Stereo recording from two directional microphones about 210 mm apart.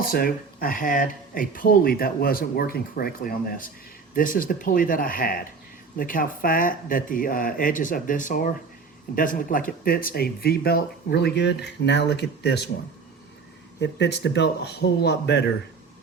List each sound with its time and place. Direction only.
0.0 s speech: 45° left (ahead or behind)
13.7 s speech: 55° left (ahead or behind)